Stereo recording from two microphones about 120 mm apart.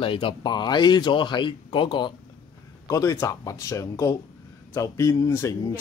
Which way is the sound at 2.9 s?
25° left (ahead or behind).